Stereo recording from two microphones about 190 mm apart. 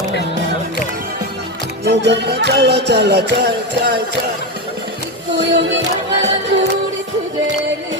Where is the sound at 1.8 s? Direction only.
65° right (ahead or behind).